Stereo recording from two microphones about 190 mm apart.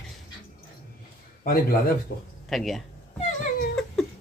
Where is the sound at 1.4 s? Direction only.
50° left (ahead or behind).